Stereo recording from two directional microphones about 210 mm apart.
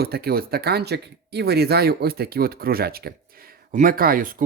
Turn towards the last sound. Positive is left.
turn(degrees=-40)  # may be behind; listen again after turning